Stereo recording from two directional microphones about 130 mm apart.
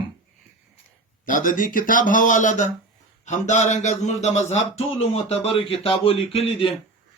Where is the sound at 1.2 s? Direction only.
90° left.